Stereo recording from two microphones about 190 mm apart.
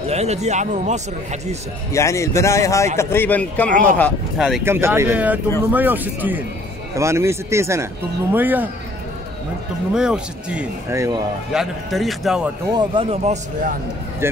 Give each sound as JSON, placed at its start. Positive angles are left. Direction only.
{"t": 0.1, "sound": "speech", "side_deg": -35}
{"t": 1.9, "sound": "a man's voice", "side_deg": 15}
{"t": 4.6, "sound": "speech", "side_deg": -15}
{"t": 9.9, "sound": "speech", "side_deg": -5}
{"t": 11.5, "sound": "speech", "side_deg": 0}
{"t": 12.7, "sound": "speech", "side_deg": -30}
{"t": 14.2, "sound": "speech", "side_deg": -10}